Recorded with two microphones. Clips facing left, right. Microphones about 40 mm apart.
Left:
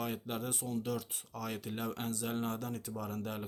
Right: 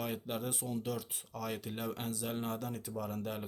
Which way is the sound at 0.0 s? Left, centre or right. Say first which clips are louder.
Even; centre.